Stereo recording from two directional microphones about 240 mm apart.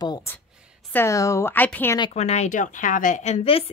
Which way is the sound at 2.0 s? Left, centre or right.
Left.